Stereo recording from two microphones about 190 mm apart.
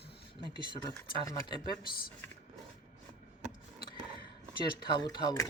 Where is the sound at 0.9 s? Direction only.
20° left (ahead or behind).